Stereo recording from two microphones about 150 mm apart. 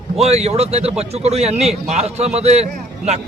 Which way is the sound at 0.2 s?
45° right (ahead or behind).